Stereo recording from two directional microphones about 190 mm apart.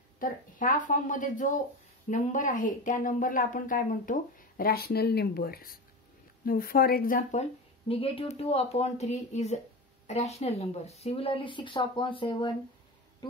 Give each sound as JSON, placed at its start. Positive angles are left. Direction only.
{"t": 0.2, "sound": "speech", "side_deg": 45}
{"t": 7.9, "sound": "a woman's voice", "side_deg": 30}